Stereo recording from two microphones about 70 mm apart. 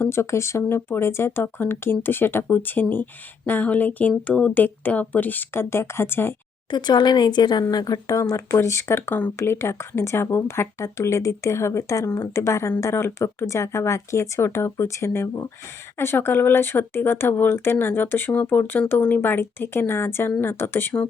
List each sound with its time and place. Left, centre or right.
0.0 s a woman's voice: left
6.7 s speech: left
7.7 s speech: left